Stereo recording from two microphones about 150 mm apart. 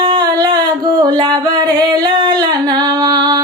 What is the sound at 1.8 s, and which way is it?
Singing, 30° right (ahead or behind).